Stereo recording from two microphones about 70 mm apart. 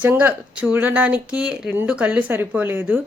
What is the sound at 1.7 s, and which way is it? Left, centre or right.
A woman's voice, right.